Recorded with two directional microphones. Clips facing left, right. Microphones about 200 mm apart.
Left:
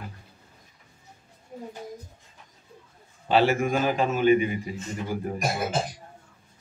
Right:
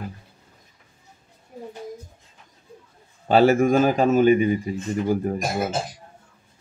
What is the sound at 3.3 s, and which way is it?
A man's voice, 45° right (ahead or behind).